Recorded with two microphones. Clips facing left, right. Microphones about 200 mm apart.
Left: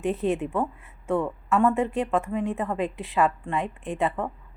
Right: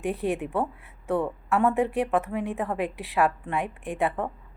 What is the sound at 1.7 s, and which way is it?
Speech, 15° right (ahead or behind).